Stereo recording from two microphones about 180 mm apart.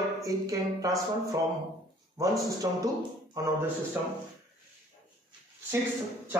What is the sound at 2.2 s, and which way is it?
Speech, 20° right (ahead or behind).